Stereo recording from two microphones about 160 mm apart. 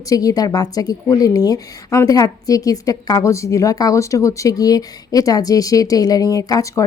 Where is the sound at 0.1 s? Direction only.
20° left (ahead or behind).